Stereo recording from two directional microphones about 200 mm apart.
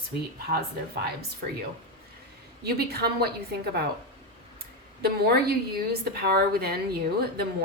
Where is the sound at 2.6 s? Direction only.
50° right (ahead or behind).